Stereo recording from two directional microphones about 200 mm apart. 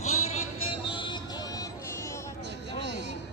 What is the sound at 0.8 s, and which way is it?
Music, 25° left (ahead or behind).